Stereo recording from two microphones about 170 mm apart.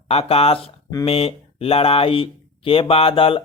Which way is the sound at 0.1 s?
35° left (ahead or behind).